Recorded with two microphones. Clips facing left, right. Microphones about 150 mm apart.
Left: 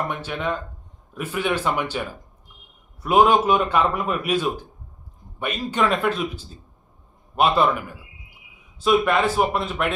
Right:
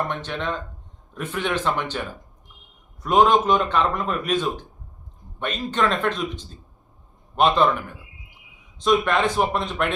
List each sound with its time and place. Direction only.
0.1 s a man's voice: 10° left (ahead or behind)